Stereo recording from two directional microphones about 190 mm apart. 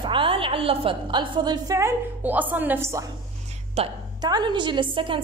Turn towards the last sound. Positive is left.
turn(degrees=-25)  # may be behind; listen again after turning